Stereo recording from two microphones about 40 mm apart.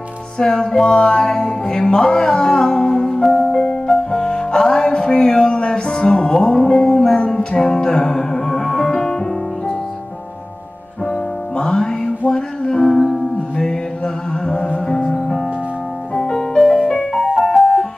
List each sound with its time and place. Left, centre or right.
0.4 s music: centre
11.1 s music: centre
13.6 s mantra: centre
14.9 s music: centre
16.5 s music: centre
16.9 s music: centre
17.4 s music: centre